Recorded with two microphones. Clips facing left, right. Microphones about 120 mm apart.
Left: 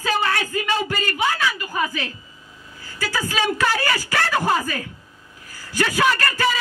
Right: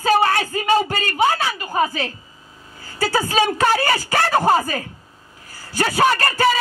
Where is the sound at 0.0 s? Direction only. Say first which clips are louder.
Right 5 dB; 40° right (ahead or behind).